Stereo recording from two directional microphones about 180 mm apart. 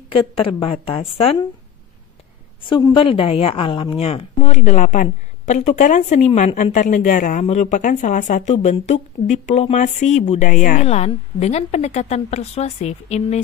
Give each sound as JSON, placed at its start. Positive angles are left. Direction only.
{"t": 0.1, "sound": "speech", "side_deg": 30}
{"t": 2.6, "sound": "speech", "side_deg": 25}